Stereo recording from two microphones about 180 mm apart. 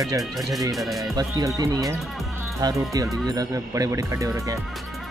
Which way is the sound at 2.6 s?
20° right (ahead or behind).